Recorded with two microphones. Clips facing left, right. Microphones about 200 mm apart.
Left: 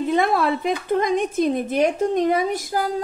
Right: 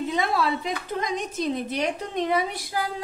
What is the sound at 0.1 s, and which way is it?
A woman's voice, 55° left (ahead or behind).